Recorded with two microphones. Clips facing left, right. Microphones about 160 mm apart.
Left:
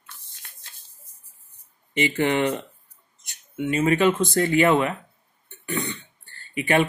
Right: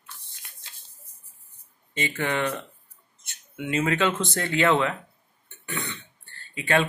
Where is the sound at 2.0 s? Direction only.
20° left (ahead or behind).